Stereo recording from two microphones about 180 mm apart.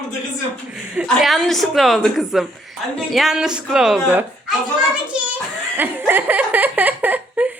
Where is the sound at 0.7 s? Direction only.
5° right (ahead or behind).